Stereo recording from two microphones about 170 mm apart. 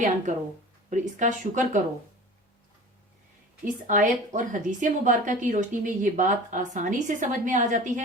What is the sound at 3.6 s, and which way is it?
Speech, 50° right (ahead or behind).